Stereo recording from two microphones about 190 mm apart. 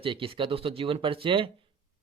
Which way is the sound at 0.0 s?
30° right (ahead or behind).